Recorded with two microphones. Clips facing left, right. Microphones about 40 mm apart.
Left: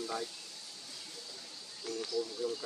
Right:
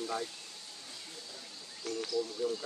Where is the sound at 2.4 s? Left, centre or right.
Centre.